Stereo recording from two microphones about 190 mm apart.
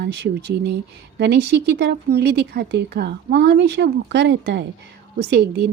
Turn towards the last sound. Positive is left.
turn(degrees=-60)  # may be behind; listen again after turning